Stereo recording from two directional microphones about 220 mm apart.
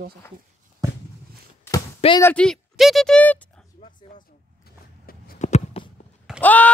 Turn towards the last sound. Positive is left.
turn(degrees=5)  # may be behind; listen again after turning